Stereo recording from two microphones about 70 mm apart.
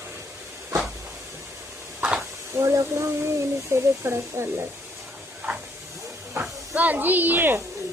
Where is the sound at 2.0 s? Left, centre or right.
Centre.